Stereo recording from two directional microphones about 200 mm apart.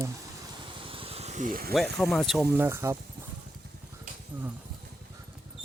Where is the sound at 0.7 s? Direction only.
25° right (ahead or behind); by 1.7 s 45° right (ahead or behind).